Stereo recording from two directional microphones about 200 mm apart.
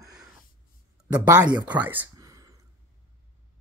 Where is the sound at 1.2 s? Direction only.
10° right (ahead or behind).